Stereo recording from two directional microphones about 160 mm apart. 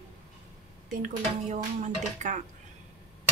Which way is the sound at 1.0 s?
50° right (ahead or behind).